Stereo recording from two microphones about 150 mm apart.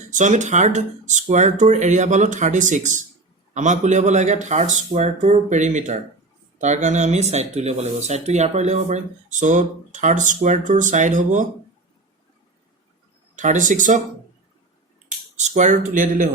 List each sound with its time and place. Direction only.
0.1 s speech: 55° right (ahead or behind)
13.3 s speech: 55° right (ahead or behind)
15.4 s speech: 50° right (ahead or behind)